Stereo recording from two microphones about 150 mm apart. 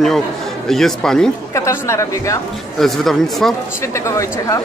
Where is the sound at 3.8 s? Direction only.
20° left (ahead or behind).